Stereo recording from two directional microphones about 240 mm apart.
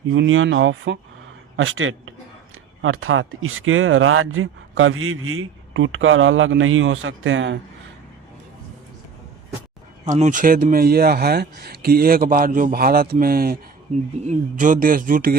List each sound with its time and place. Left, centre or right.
0.1 s a man's voice: right
10.1 s speech: right